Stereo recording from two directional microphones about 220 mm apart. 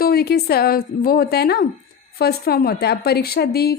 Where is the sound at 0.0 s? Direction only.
45° left (ahead or behind).